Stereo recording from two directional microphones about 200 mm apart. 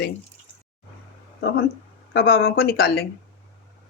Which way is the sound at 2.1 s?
55° left (ahead or behind).